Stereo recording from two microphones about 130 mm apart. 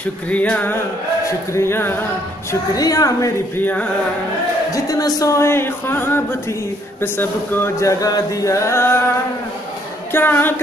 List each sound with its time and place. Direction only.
0.3 s music: 10° left (ahead or behind)
2.7 s music: 30° left (ahead or behind)
3.5 s music: 10° left (ahead or behind)
4.7 s music: 25° left (ahead or behind)
10.1 s music: 15° left (ahead or behind)